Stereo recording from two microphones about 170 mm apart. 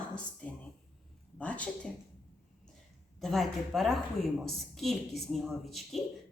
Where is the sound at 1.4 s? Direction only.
10° left (ahead or behind).